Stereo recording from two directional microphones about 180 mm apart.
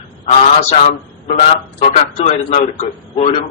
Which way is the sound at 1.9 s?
40° left (ahead or behind).